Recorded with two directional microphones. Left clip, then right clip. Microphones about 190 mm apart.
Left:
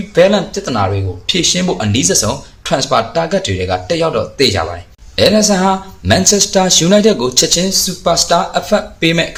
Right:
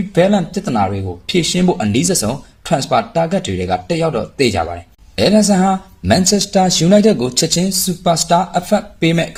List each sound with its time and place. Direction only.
0.1 s speech: 40° right (ahead or behind)